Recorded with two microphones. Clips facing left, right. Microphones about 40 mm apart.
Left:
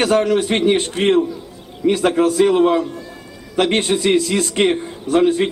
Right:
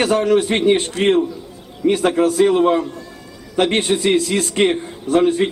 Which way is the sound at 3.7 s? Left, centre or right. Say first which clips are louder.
Even; left.